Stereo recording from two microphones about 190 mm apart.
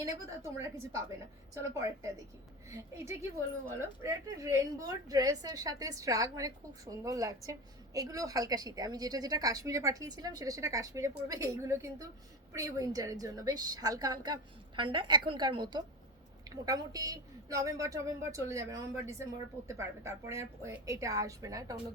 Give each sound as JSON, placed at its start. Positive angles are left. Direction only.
{"t": 0.0, "sound": "speech", "side_deg": -15}
{"t": 2.6, "sound": "a woman's voice", "side_deg": -15}